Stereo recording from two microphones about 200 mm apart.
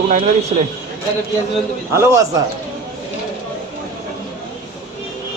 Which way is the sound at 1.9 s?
15° right (ahead or behind).